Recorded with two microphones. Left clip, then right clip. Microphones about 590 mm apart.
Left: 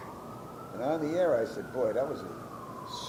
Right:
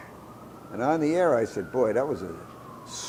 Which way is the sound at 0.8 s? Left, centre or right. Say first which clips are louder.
Right 5 dB; right.